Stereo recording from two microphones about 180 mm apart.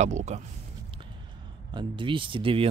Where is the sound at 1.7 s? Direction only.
25° right (ahead or behind).